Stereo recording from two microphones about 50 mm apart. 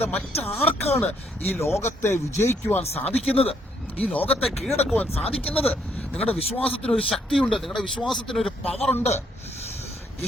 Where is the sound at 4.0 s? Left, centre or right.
Left.